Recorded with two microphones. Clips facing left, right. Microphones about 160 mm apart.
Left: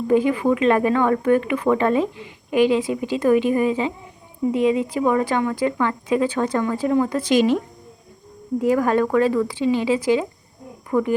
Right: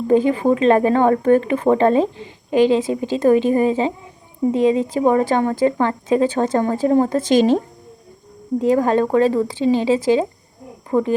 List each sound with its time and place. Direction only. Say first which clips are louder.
0.1 s speech: right 3 dB; 30° right (ahead or behind)